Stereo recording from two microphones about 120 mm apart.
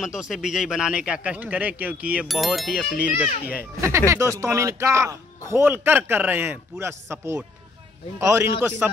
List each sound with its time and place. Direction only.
0.0 s a man's voice: 5° right (ahead or behind)
4.1 s a man's voice: 25° right (ahead or behind)